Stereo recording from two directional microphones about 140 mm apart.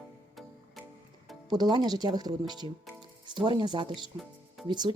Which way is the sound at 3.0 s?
35° right (ahead or behind).